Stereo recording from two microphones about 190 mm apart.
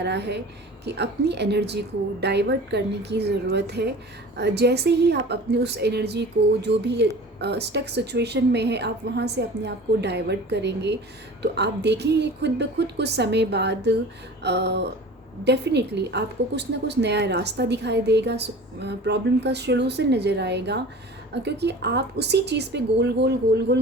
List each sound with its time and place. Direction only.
0.0 s a woman's voice: 65° right (ahead or behind)